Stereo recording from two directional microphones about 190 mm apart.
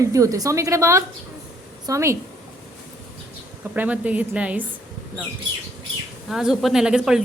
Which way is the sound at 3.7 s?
10° right (ahead or behind).